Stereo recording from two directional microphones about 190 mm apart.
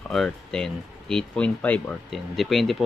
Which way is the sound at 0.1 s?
5° left (ahead or behind).